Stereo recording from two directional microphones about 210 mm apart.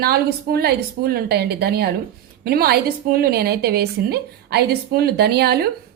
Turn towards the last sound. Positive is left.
turn(degrees=-50)  # may be behind; listen again after turning